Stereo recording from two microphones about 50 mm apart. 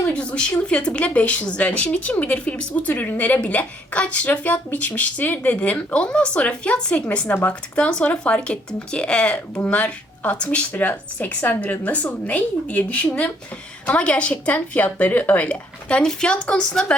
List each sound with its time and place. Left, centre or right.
0.1 s a woman's voice: left
5.9 s a woman's voice: centre